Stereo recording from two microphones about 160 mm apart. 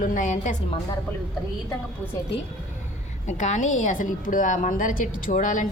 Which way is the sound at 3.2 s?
50° left (ahead or behind).